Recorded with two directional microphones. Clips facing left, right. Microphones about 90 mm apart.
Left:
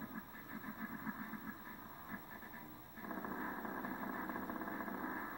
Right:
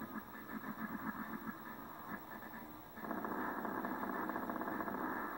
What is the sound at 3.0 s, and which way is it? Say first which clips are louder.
Vehicle: right 3 dB; 20° right (ahead or behind).